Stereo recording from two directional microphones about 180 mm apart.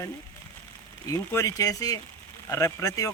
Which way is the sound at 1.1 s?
15° left (ahead or behind).